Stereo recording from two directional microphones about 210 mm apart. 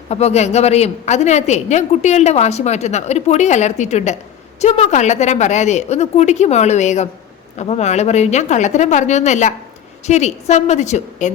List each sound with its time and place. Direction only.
0.1 s a woman's voice: 30° left (ahead or behind)